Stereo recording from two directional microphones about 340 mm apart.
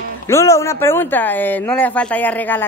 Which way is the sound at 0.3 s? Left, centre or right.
Centre.